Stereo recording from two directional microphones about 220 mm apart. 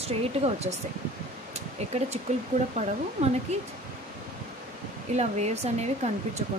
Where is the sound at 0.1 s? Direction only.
30° right (ahead or behind).